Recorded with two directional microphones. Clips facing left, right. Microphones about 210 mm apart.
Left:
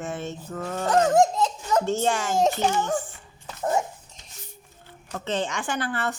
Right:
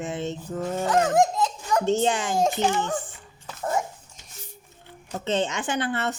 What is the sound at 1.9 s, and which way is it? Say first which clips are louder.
Speech: right 2 dB; 20° right (ahead or behind).